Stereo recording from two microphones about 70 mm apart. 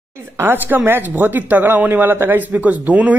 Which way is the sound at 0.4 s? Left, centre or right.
Right.